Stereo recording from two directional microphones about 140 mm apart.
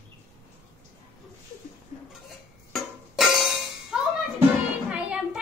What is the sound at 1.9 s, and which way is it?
Dishes, 55° left (ahead or behind).